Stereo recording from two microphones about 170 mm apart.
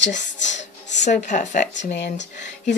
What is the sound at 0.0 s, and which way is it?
Speech, 90° left.